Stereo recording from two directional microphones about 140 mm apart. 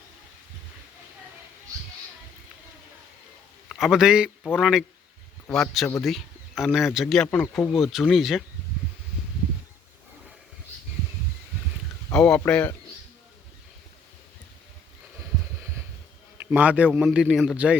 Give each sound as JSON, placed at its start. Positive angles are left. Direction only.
{"t": 3.7, "sound": "speech", "side_deg": 0}
{"t": 7.4, "sound": "a man's voice", "side_deg": 15}
{"t": 7.7, "sound": "speech", "side_deg": 0}
{"t": 12.1, "sound": "a man's voice", "side_deg": 5}
{"t": 16.5, "sound": "a man's voice", "side_deg": -10}